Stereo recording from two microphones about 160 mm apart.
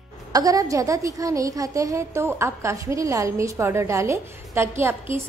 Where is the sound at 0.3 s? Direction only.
20° right (ahead or behind).